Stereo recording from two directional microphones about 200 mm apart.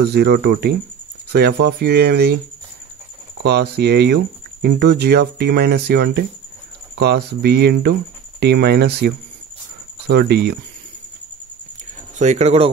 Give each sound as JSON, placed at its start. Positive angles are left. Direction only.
{"t": 0.1, "sound": "speech", "side_deg": -55}
{"t": 3.4, "sound": "speech", "side_deg": -55}
{"t": 12.2, "sound": "speech", "side_deg": -35}